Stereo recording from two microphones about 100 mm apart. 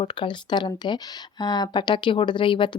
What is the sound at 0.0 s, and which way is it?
Speech, 55° left (ahead or behind).